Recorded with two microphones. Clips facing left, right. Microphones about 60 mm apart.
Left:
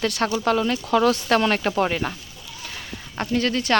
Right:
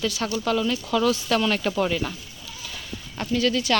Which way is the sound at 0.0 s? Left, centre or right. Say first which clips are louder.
Left 4 dB; left.